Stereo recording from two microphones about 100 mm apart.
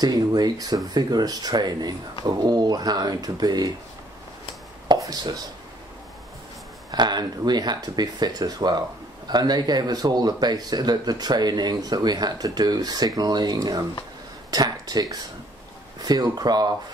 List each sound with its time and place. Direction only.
0.0 s speech: 40° right (ahead or behind)
4.8 s speech: 40° right (ahead or behind)
6.9 s speech: 45° right (ahead or behind)